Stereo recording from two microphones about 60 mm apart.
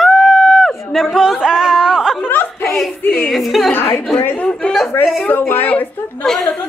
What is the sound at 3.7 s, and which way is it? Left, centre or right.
Speech, left.